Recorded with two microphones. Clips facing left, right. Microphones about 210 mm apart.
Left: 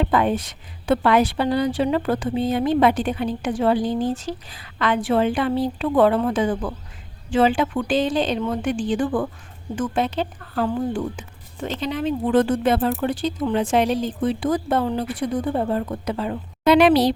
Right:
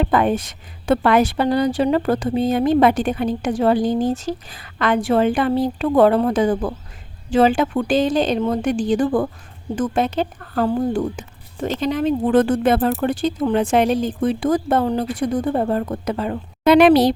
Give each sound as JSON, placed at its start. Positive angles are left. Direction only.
{"t": 0.0, "sound": "speech", "side_deg": -50}